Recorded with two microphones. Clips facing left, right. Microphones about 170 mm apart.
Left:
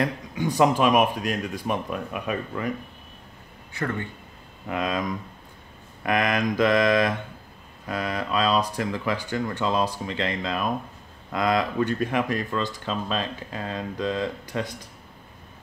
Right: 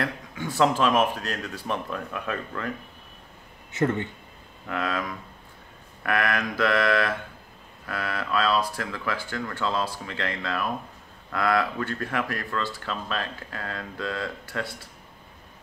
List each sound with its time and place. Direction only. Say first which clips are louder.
0.0 s speech: left 5 dB; 15° left (ahead or behind)
3.7 s speech: right 4 dB; 20° right (ahead or behind)
4.6 s speech: left 2 dB; 15° left (ahead or behind)